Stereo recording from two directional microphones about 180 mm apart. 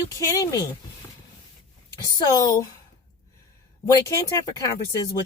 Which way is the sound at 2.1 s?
20° left (ahead or behind).